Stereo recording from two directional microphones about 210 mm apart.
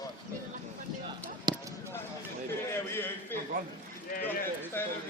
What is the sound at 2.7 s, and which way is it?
Speech, 10° left (ahead or behind).